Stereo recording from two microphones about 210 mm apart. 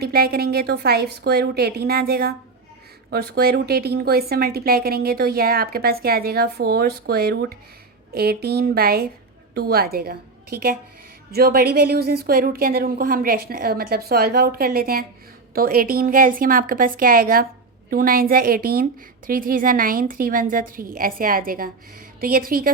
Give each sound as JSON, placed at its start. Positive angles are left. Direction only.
{"t": 0.0, "sound": "a woman's voice", "side_deg": -45}